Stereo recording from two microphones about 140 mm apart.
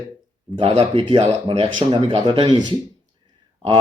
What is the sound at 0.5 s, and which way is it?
Speech, 40° right (ahead or behind).